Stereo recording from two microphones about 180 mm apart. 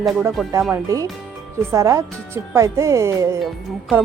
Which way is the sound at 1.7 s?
20° right (ahead or behind).